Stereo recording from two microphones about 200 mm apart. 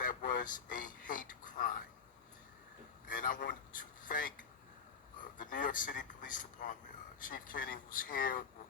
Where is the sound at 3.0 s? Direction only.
45° left (ahead or behind).